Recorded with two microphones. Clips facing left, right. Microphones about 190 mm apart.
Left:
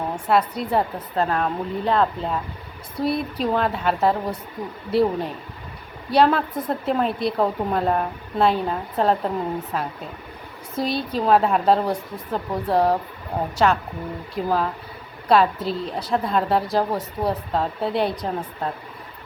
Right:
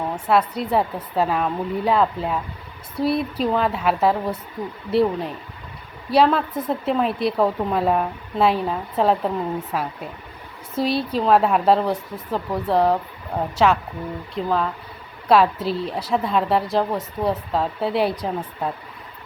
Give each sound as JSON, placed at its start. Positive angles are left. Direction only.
{"t": 0.3, "sound": "a woman's voice", "side_deg": 0}